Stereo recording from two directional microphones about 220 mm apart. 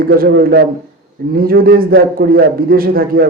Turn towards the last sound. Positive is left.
turn(degrees=-40)  # may be behind; listen again after turning